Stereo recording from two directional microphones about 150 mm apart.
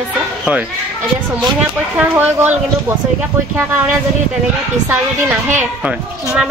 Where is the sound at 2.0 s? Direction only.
10° right (ahead or behind).